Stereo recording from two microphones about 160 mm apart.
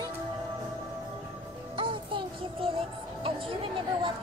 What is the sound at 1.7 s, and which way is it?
A child's voice, 30° right (ahead or behind).